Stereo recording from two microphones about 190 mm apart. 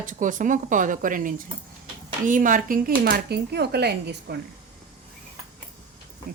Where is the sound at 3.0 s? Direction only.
55° right (ahead or behind).